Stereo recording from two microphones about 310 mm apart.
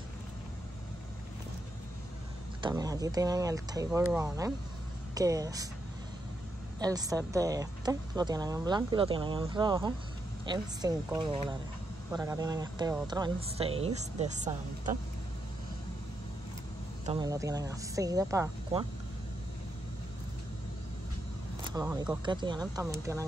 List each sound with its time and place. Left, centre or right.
2.6 s speech: centre
6.8 s speech: centre
17.0 s speech: centre
21.6 s speech: centre